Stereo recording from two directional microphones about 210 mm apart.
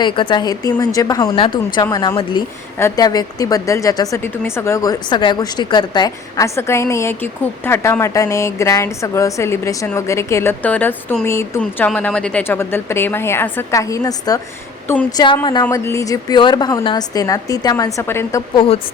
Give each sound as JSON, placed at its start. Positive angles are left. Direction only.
{"t": 0.0, "sound": "speech", "side_deg": 20}